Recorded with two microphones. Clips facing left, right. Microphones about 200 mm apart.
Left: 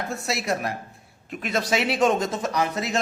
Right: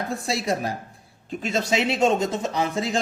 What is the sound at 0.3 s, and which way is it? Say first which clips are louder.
Speech: right 1 dB; 30° right (ahead or behind).